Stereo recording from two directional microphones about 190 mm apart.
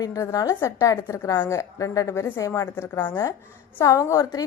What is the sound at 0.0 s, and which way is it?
A woman's voice, 15° left (ahead or behind).